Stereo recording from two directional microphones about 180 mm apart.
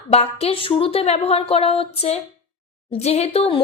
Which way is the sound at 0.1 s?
35° left (ahead or behind).